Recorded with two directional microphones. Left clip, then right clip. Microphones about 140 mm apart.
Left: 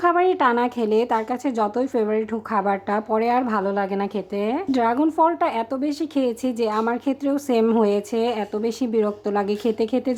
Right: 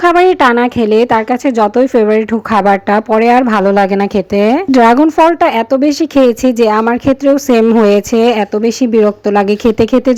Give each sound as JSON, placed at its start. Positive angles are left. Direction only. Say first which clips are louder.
{"t": 0.0, "sound": "a woman's voice", "louder": "right 11 dB", "side_deg": -35}